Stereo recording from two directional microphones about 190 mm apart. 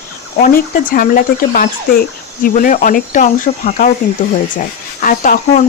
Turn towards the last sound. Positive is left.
turn(degrees=45)  # may be behind; listen again after turning